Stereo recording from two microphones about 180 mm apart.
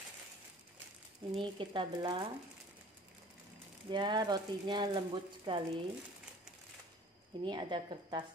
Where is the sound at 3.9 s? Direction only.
25° right (ahead or behind).